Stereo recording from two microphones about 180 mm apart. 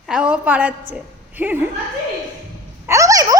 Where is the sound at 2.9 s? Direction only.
20° right (ahead or behind).